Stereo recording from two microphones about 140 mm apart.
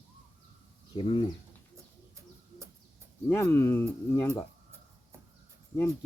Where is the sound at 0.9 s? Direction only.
40° left (ahead or behind).